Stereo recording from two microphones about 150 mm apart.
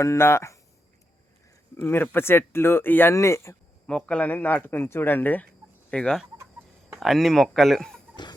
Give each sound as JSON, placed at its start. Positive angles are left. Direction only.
{"t": 0.0, "sound": "speech", "side_deg": 20}
{"t": 1.7, "sound": "speech", "side_deg": 15}
{"t": 3.8, "sound": "speech", "side_deg": 5}